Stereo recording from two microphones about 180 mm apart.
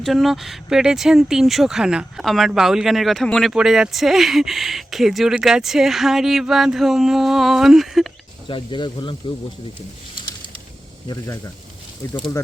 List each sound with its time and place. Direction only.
0.0 s speech: centre (ahead or behind)
8.4 s speech: 25° left (ahead or behind)
11.1 s speech: 15° left (ahead or behind)